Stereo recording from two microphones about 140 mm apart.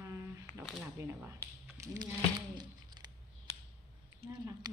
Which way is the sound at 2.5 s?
30° right (ahead or behind).